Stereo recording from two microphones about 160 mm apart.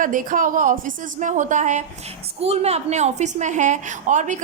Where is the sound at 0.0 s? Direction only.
55° right (ahead or behind).